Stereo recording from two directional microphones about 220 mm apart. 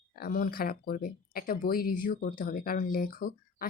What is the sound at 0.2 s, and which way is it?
Speech, 40° left (ahead or behind).